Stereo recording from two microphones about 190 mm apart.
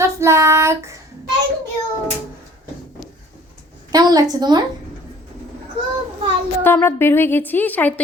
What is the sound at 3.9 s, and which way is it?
Speech, 20° right (ahead or behind).